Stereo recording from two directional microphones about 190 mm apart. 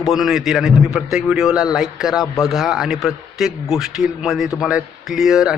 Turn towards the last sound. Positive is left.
turn(degrees=0)  # may be behind; listen again after turning